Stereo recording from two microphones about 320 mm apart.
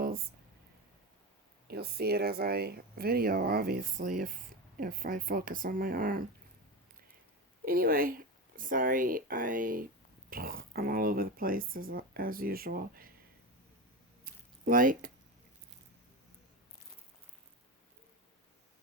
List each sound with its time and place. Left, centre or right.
1.6 s speech: right
7.6 s speech: right
14.3 s a sound: right